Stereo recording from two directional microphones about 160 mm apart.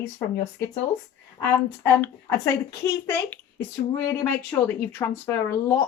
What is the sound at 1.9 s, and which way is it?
A woman's voice, 20° left (ahead or behind).